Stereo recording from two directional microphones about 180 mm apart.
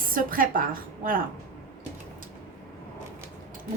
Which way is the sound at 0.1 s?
50° right (ahead or behind).